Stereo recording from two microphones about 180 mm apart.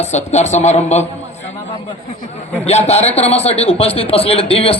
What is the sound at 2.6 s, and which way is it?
A man's voice, 35° left (ahead or behind).